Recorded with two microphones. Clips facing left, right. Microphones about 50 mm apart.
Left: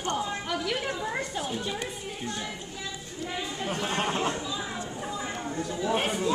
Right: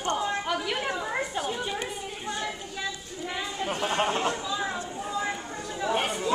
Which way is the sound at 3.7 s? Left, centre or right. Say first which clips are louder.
Right 3 dB; right.